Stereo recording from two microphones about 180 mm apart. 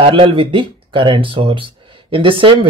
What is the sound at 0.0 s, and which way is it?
Speech, 30° right (ahead or behind).